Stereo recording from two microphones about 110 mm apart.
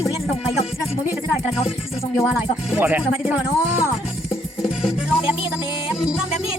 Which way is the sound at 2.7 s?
20° right (ahead or behind).